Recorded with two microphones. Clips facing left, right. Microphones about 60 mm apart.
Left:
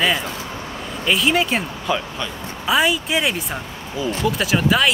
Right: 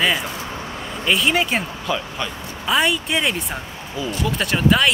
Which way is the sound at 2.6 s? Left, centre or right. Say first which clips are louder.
Left 1 dB; centre.